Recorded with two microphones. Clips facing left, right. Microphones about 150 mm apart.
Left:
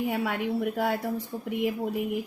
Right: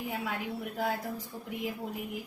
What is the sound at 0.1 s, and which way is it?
A woman's voice, 70° left (ahead or behind).